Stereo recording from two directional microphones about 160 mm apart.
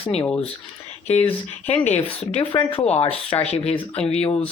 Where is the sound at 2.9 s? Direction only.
40° left (ahead or behind).